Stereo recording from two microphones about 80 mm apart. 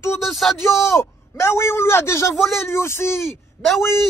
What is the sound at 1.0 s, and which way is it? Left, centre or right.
Speech, left.